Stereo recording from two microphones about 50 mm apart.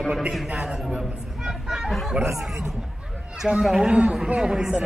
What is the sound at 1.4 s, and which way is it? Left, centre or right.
Vehicle, centre.